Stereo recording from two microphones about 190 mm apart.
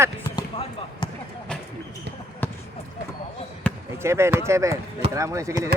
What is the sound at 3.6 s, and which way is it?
Basketball bounce, 5° left (ahead or behind).